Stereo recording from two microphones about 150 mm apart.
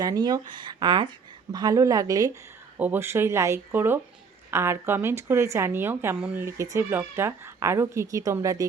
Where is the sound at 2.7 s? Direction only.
10° right (ahead or behind).